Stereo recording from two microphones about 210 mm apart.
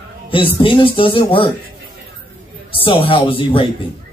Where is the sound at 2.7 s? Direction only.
25° left (ahead or behind).